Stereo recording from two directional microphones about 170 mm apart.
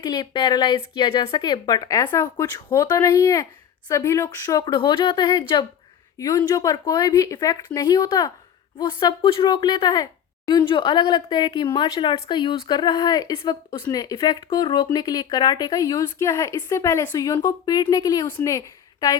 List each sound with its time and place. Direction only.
0.0 s speech: 20° left (ahead or behind)
6.1 s speech: 20° left (ahead or behind)
13.8 s a woman's voice: 20° left (ahead or behind)